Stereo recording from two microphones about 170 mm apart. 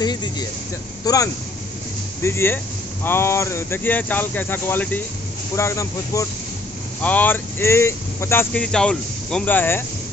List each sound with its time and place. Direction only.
0.0 s speech: 25° left (ahead or behind)